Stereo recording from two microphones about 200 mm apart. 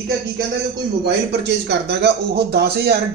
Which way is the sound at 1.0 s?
55° right (ahead or behind).